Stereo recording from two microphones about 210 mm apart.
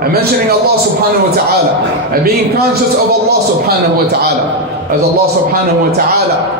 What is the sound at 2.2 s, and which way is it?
Speech, 50° right (ahead or behind).